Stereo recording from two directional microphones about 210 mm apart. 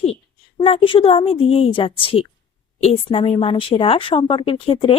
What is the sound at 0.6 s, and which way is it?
Speech, 25° left (ahead or behind).